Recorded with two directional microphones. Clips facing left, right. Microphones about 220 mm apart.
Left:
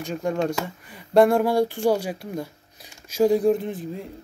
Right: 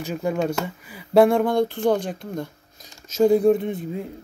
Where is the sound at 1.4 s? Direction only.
10° left (ahead or behind).